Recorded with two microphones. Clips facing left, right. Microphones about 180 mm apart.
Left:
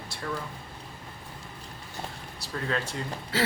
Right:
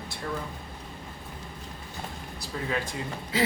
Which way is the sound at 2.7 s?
15° right (ahead or behind).